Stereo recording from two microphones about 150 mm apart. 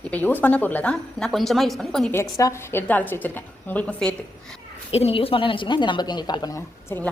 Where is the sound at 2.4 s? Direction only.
15° left (ahead or behind).